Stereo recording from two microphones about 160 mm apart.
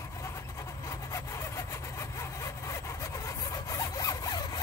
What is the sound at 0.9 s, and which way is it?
Vehicle, 20° left (ahead or behind).